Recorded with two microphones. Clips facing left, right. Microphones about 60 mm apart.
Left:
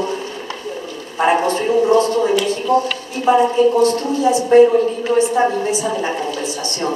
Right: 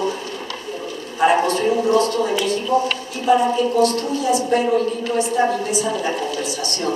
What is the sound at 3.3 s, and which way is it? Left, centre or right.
A woman's voice, left.